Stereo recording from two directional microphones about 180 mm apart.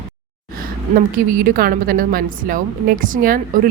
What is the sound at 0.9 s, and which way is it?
A woman's voice, 50° right (ahead or behind).